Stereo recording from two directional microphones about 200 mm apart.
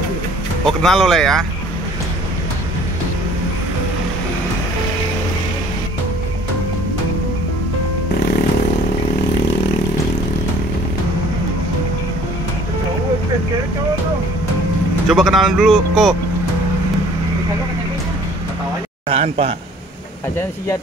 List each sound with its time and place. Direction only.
0.7 s speech: centre (ahead or behind)
15.0 s speech: centre (ahead or behind)
19.0 s a sound: 30° right (ahead or behind)